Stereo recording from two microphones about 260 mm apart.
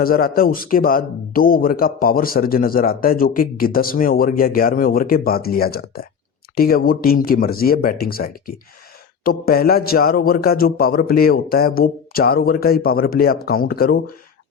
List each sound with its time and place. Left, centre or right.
0.0 s speech: left